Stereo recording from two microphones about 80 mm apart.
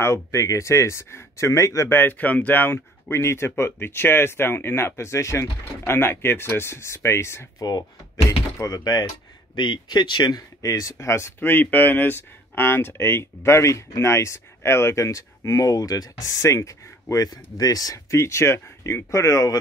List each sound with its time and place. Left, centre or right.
0.0 s speech: left
1.9 s speech: left
7.5 s speech: left
9.6 s speech: left
10.6 s speech: left
18.1 s speech: left